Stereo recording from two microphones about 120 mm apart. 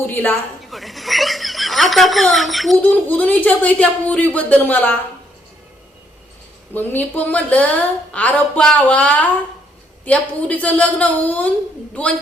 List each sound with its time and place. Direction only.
0.1 s a woman's voice: 15° left (ahead or behind)
0.6 s speech: centre (ahead or behind)
2.8 s a woman's voice: 15° left (ahead or behind)
6.7 s a woman's voice: 15° left (ahead or behind)